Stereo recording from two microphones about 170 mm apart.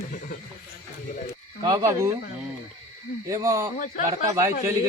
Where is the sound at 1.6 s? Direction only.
20° right (ahead or behind).